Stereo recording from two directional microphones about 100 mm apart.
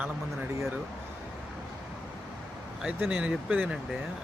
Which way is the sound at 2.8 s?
10° right (ahead or behind).